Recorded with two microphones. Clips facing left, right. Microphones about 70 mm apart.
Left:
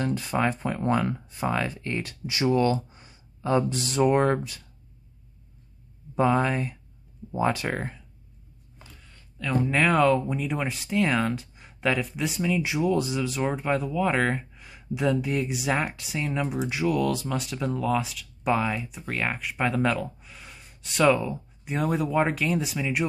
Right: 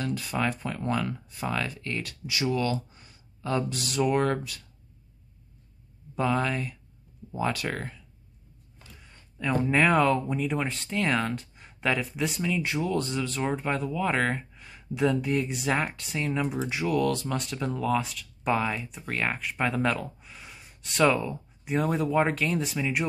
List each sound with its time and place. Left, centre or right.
0.0 s speech: left
6.1 s speech: left
8.9 s a sound: centre
9.7 s speech: centre